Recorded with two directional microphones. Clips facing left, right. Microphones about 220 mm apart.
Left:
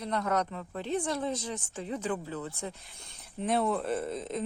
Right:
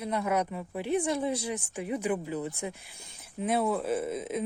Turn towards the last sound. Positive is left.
turn(degrees=-5)  # may be behind; listen again after turning